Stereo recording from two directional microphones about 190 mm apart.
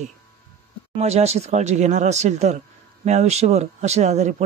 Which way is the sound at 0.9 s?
35° right (ahead or behind).